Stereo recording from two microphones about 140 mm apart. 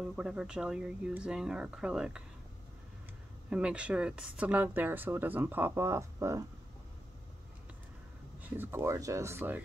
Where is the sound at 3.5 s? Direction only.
10° right (ahead or behind).